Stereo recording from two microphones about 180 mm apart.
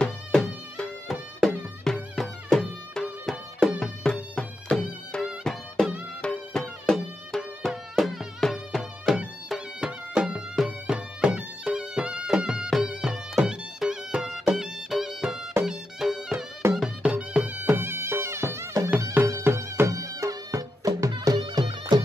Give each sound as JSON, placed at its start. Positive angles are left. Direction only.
{"t": 0.0, "sound": "music", "side_deg": 5}